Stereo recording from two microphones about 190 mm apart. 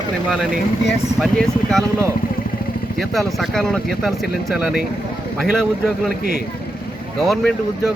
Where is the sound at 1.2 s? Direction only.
Centre (ahead or behind).